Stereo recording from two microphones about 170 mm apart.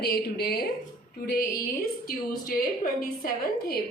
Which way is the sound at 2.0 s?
60° left (ahead or behind).